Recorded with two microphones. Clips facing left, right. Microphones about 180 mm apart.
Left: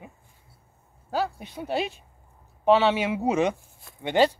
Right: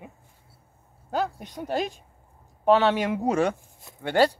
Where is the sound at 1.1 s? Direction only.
5° left (ahead or behind).